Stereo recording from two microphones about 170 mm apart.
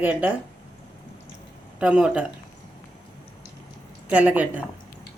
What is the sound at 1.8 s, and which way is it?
Speech, 5° right (ahead or behind).